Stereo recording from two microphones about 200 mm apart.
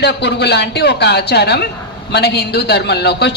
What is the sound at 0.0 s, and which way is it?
A woman's voice, 55° left (ahead or behind).